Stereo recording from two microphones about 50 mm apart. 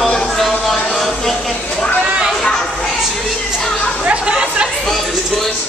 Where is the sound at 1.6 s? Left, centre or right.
Centre.